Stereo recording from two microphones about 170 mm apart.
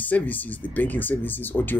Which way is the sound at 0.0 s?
10° left (ahead or behind).